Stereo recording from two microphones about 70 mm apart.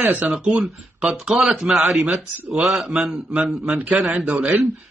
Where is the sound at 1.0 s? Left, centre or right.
Centre.